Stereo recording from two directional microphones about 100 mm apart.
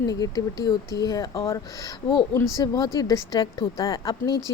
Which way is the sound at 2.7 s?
45° left (ahead or behind).